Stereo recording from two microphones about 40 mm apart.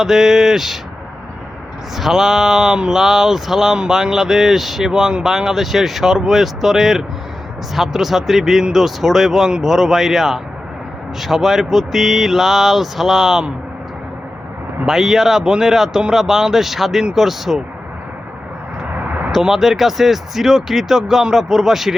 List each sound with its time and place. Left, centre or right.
0.0 s speech: centre
2.0 s speech: centre
4.9 s speech: centre
14.8 s speech: centre
18.9 s a sound: right
19.3 s speech: centre